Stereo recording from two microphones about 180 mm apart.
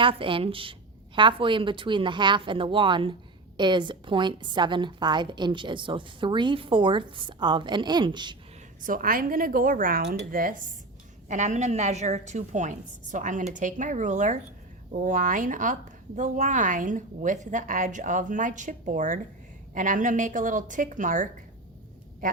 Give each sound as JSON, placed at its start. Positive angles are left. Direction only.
{"t": 0.0, "sound": "a woman's voice", "side_deg": -30}
{"t": 8.8, "sound": "a woman's voice", "side_deg": -50}
{"t": 11.3, "sound": "a woman's voice", "side_deg": -40}